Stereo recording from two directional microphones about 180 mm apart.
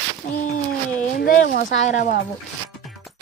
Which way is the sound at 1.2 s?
50° left (ahead or behind).